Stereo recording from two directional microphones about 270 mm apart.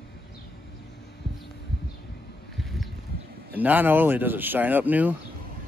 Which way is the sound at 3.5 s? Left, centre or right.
Centre.